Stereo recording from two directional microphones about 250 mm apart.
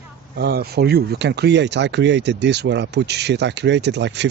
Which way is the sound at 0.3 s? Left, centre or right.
Right.